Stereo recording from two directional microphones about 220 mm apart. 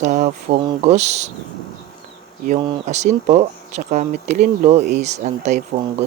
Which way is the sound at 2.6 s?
30° right (ahead or behind).